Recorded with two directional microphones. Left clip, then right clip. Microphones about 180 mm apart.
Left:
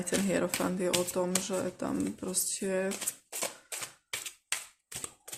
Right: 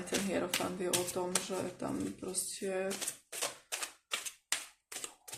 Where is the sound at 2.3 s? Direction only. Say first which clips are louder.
Left 5 dB; 40° left (ahead or behind).